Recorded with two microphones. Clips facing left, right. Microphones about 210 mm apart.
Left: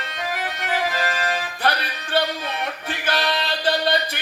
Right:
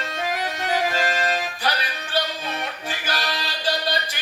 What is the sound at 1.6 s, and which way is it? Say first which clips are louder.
Music: left 3 dB; 55° left (ahead or behind).